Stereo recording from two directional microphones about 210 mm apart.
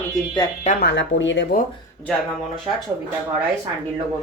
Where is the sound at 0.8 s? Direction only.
55° left (ahead or behind).